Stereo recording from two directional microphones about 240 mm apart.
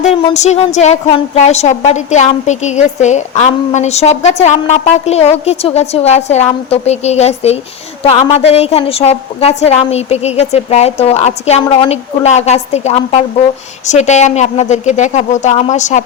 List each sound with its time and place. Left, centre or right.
0.0 s a woman's voice: left